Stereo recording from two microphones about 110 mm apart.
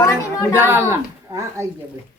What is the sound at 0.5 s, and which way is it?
Speech, 20° right (ahead or behind).